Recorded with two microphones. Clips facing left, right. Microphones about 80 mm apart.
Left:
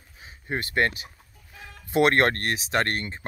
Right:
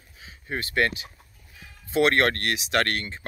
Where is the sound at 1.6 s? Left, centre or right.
Left.